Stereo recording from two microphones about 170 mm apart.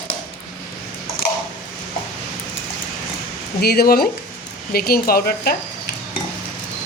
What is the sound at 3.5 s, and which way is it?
Speech, 65° left (ahead or behind).